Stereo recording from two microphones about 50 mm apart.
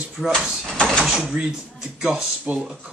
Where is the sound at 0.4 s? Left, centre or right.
Centre.